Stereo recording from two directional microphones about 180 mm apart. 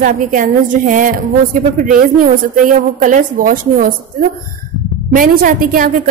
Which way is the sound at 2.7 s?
45° right (ahead or behind).